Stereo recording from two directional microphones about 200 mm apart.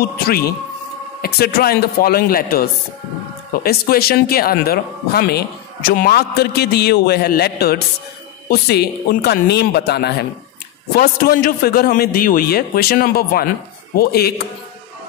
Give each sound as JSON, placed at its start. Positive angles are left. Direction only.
{"t": 0.2, "sound": "speech", "side_deg": 50}